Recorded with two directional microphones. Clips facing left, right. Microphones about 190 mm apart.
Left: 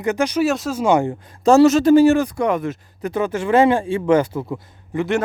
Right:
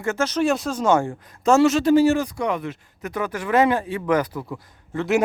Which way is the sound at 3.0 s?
25° left (ahead or behind).